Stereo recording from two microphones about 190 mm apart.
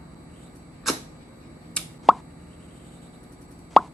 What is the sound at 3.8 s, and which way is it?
Plop, centre (ahead or behind).